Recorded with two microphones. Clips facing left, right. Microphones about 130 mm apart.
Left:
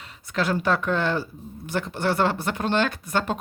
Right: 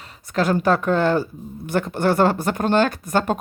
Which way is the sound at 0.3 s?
45° right (ahead or behind).